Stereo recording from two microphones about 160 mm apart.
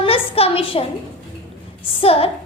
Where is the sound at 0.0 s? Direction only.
35° left (ahead or behind).